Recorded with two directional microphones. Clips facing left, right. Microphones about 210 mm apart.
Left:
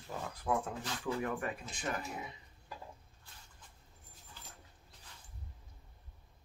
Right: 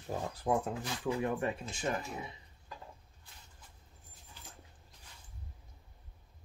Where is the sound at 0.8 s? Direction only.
15° right (ahead or behind).